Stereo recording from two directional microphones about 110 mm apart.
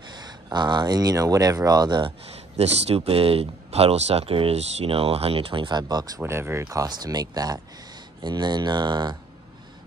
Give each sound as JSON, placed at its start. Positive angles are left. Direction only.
{"t": 0.1, "sound": "speech", "side_deg": -40}
{"t": 2.3, "sound": "speech", "side_deg": -70}
{"t": 6.6, "sound": "speech", "side_deg": -35}